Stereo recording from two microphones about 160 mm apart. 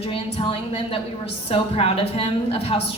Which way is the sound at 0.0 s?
35° left (ahead or behind).